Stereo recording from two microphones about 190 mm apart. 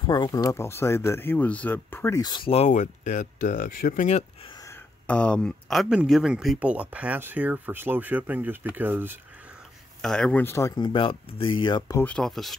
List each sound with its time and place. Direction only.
0.0 s speech: 20° left (ahead or behind); by 4.2 s 45° left (ahead or behind)
5.0 s speech: 5° left (ahead or behind); by 9.2 s 10° right (ahead or behind)
10.0 s speech: 5° left (ahead or behind); by 12.0 s 25° left (ahead or behind)
12.0 s speech: 5° left (ahead or behind)